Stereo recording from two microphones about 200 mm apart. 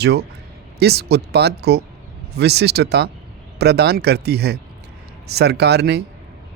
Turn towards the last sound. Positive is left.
turn(degrees=-55)  # may be behind; listen again after turning